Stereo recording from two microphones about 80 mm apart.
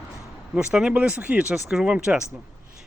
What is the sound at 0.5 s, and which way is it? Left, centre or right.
Speech, centre.